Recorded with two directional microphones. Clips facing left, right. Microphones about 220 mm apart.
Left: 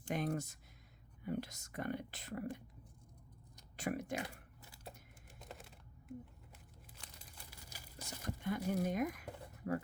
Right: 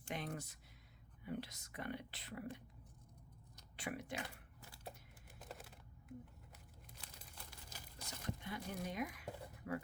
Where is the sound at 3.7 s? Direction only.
45° left (ahead or behind).